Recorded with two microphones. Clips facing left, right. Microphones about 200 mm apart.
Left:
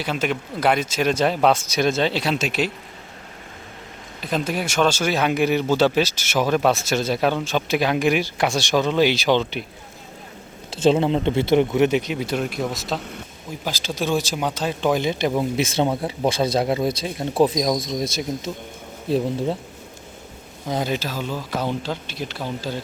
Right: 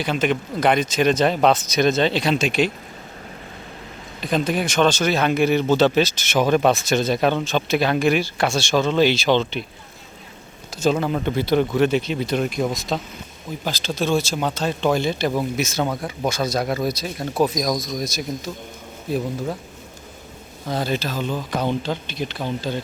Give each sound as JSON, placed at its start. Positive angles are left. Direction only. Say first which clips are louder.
{"t": 0.0, "sound": "speech", "louder": "right 3 dB", "side_deg": 5}
{"t": 4.2, "sound": "speech", "louder": "right 3 dB", "side_deg": 5}
{"t": 10.8, "sound": "speech", "louder": "left 3 dB", "side_deg": 25}
{"t": 20.7, "sound": "speech", "louder": "even", "side_deg": 15}